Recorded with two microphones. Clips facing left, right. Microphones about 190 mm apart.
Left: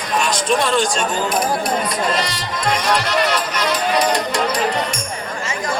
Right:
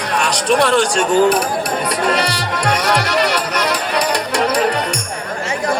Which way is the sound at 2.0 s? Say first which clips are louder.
Right 3 dB; 65° right (ahead or behind).